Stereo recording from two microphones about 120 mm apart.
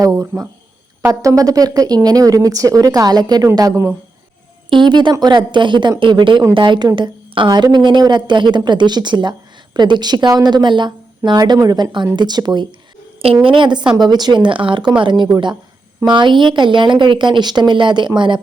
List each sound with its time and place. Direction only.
0.0 s speech: 25° right (ahead or behind)
4.7 s a woman's voice: 40° right (ahead or behind)
13.2 s a woman's voice: 45° right (ahead or behind)